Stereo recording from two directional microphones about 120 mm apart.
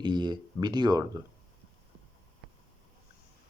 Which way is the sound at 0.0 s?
40° right (ahead or behind).